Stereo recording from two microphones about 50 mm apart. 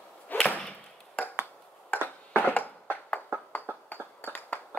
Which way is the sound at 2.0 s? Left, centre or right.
Left.